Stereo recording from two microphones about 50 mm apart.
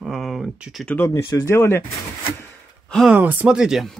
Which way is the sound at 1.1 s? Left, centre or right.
Left.